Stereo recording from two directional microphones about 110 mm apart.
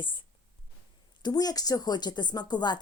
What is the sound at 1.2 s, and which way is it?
Speech, 35° left (ahead or behind).